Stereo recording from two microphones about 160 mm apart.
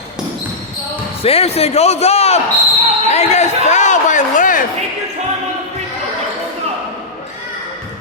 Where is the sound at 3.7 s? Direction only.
50° left (ahead or behind).